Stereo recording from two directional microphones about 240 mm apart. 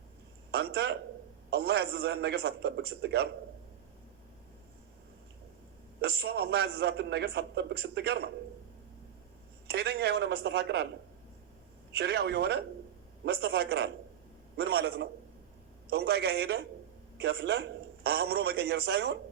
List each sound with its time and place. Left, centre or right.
0.5 s a man's voice: right
6.0 s a man's voice: right
9.6 s a man's voice: right
11.9 s a man's voice: right